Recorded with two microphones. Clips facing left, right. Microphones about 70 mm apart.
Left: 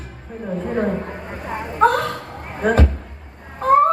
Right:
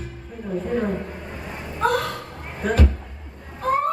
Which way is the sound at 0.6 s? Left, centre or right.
Left.